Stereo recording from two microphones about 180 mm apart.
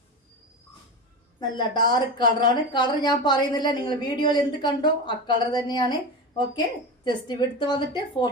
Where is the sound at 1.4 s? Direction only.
25° left (ahead or behind).